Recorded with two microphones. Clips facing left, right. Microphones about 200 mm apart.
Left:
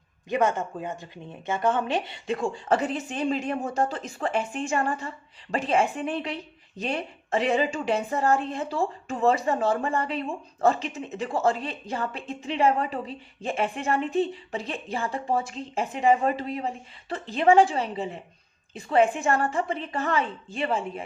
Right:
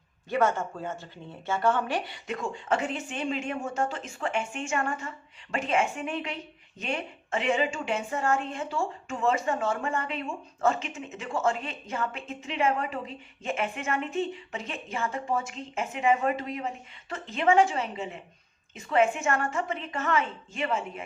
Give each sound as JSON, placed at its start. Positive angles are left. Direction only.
{"t": 0.3, "sound": "a woman's voice", "side_deg": 15}